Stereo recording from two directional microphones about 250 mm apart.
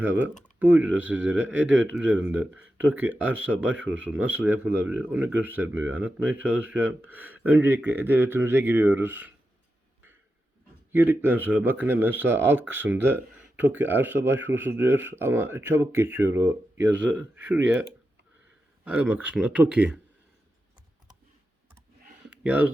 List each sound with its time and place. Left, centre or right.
0.0 s speech: centre
1.5 s speech: right
2.0 s speech: centre
3.6 s speech: right
4.4 s speech: centre
10.9 s speech: centre
18.9 s speech: centre
22.3 s a sound: centre